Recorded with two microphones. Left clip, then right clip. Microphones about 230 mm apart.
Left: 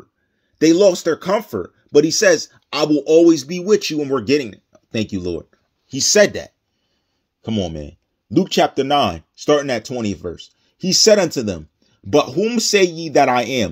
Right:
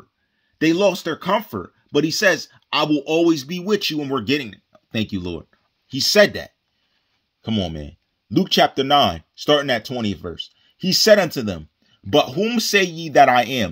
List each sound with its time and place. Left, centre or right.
0.6 s speech: centre